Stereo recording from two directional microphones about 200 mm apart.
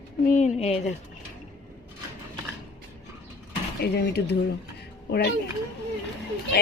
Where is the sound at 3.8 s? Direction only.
55° left (ahead or behind).